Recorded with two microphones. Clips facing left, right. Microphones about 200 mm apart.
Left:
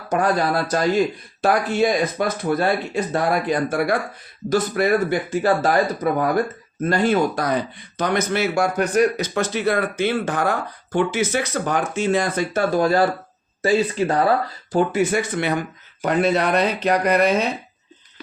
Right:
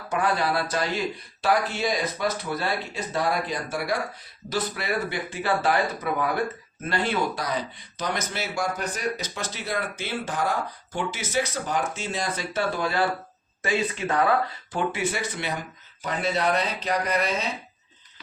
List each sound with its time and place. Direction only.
0.1 s speech: 40° left (ahead or behind); by 17.4 s 65° left (ahead or behind)